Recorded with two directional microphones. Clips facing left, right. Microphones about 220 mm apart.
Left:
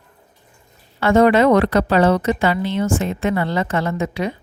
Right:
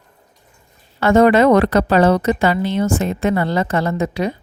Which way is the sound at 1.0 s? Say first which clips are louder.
Right 2 dB; 45° right (ahead or behind).